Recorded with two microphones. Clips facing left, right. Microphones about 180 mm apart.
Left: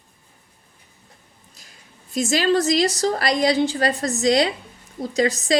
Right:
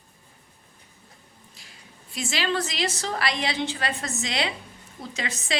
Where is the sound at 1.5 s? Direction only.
45° left (ahead or behind).